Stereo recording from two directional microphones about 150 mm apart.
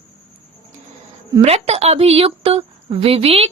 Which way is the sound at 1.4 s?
45° right (ahead or behind).